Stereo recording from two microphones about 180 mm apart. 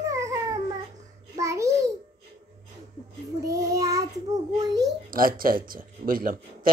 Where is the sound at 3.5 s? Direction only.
20° right (ahead or behind).